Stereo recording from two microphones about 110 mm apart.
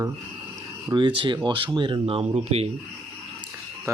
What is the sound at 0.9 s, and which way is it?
Speech, 45° right (ahead or behind).